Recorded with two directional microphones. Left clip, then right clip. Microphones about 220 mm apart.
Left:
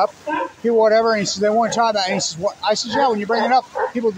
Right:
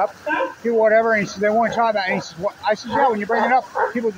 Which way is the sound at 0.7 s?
25° left (ahead or behind).